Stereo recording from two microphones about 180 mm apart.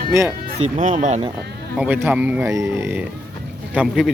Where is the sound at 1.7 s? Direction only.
10° right (ahead or behind).